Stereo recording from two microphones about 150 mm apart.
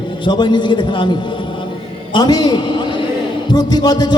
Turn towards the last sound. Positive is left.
turn(degrees=25)  # may be behind; listen again after turning